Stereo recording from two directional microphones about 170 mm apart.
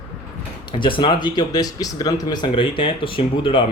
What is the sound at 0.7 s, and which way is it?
Speech, 30° left (ahead or behind).